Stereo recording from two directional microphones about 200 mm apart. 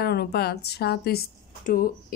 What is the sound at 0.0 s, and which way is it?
Speech, 55° left (ahead or behind).